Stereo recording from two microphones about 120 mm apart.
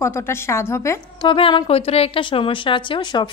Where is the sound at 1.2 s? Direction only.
45° left (ahead or behind).